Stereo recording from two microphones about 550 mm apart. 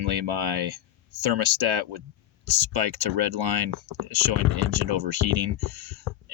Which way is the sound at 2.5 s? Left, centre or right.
Right.